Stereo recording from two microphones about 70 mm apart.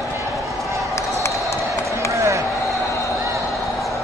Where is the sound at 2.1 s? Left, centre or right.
Right.